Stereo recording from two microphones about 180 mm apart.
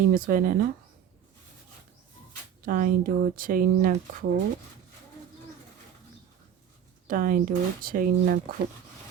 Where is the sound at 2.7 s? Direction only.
50° right (ahead or behind).